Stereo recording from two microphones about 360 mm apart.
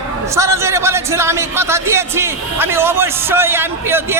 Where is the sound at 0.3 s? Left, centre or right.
Centre.